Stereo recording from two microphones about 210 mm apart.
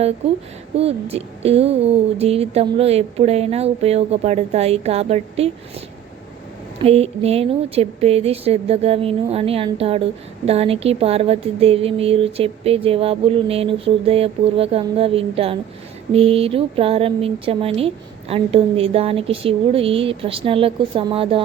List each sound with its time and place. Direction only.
0.2 s speech: 30° right (ahead or behind)
6.8 s speech: 30° right (ahead or behind)